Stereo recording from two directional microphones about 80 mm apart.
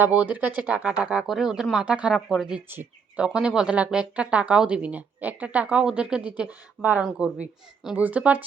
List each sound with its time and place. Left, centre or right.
0.0 s speech: centre
2.6 s speech: right
3.2 s speech: centre